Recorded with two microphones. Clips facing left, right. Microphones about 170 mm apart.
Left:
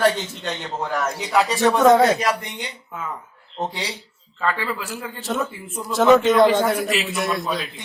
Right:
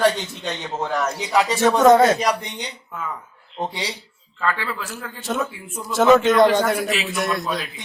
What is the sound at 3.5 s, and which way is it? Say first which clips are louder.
Speech: even; 10° right (ahead or behind).